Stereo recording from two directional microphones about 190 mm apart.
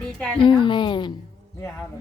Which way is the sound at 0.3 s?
25° left (ahead or behind).